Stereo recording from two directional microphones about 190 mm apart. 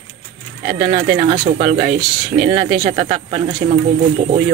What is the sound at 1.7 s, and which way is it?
Speech, 35° right (ahead or behind).